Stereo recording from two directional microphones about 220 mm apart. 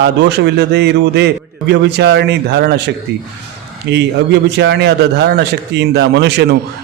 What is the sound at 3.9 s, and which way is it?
A man's voice, 50° right (ahead or behind).